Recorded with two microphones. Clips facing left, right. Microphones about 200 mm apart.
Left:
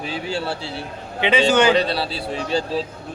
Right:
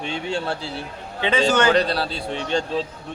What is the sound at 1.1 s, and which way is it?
Speech, 20° left (ahead or behind).